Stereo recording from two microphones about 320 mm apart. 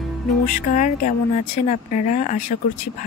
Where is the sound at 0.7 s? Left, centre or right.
Left.